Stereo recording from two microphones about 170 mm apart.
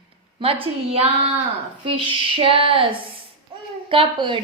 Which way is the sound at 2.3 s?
30° right (ahead or behind).